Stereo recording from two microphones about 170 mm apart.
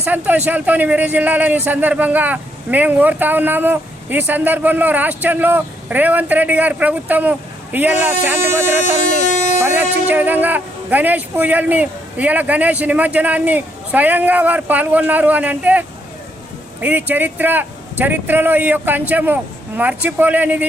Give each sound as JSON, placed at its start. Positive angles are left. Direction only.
{"t": 0.0, "sound": "a man's voice", "side_deg": -10}
{"t": 9.2, "sound": "speech", "side_deg": 45}
{"t": 9.6, "sound": "a man's voice", "side_deg": -15}
{"t": 16.8, "sound": "a man's voice", "side_deg": -10}